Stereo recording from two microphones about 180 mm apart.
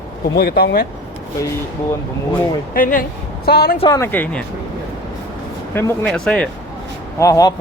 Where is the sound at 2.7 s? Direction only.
50° left (ahead or behind).